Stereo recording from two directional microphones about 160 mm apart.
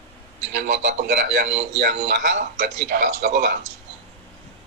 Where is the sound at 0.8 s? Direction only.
90° right.